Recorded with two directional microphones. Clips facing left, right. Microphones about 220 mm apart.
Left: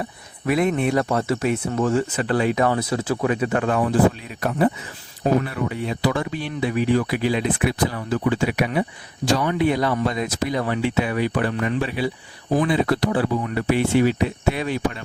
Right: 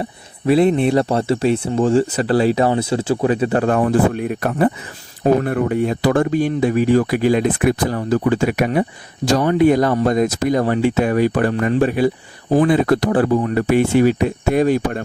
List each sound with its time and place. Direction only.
0.0 s speech: 30° right (ahead or behind); by 15.0 s 45° right (ahead or behind)